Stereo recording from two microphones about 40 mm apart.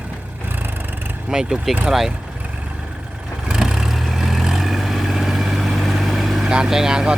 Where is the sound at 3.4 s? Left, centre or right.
Centre.